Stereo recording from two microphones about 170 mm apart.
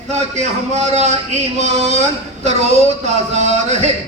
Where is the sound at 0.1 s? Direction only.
40° right (ahead or behind).